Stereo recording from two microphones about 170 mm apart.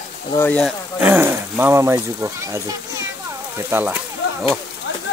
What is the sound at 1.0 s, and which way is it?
Speech, 10° right (ahead or behind).